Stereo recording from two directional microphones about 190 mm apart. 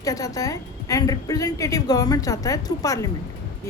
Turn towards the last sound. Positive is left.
turn(degrees=20)  # may be behind; listen again after turning